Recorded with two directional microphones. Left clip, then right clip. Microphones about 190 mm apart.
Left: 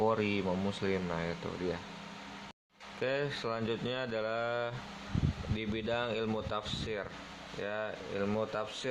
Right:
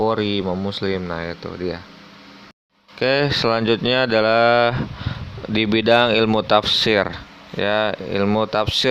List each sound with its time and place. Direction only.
0.0 s speech: 35° right (ahead or behind)
3.0 s speech: 45° right (ahead or behind)